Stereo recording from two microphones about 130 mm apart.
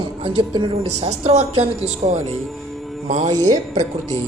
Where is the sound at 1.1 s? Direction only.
55° right (ahead or behind).